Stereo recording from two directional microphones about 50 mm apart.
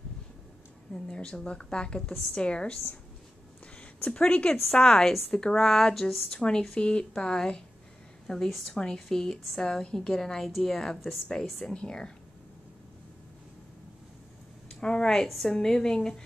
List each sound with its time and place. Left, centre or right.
0.9 s a woman's voice: centre
4.1 s a woman's voice: left; by 6.2 s centre
6.3 s speech: centre
8.5 s speech: centre
8.7 s speech: centre
11.7 s speech: centre
14.7 s speech: centre
15.2 s speech: centre
15.5 s speech: centre